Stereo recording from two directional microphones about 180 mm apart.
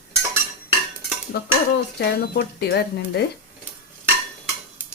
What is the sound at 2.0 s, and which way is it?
Speech, 60° left (ahead or behind).